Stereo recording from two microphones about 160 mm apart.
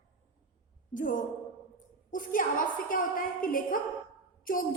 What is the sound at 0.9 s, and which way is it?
A woman's voice, 55° left (ahead or behind).